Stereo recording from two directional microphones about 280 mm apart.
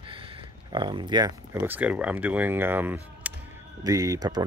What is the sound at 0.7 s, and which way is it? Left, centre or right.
Speech, centre.